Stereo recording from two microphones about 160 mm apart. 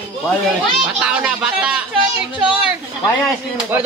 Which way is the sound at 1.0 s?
5° right (ahead or behind).